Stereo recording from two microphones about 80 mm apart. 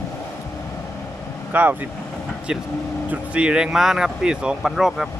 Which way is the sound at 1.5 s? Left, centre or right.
Right.